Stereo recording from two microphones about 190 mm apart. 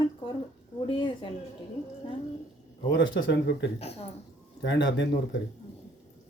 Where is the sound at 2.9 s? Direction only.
65° left (ahead or behind).